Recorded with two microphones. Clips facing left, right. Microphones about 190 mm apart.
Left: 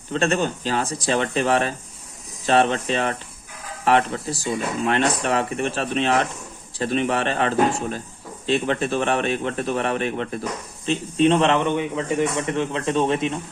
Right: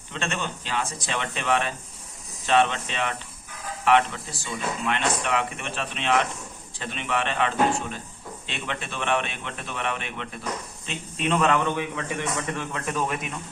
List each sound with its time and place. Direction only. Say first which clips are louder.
0.1 s a man's voice: left 9 dB; 40° left (ahead or behind)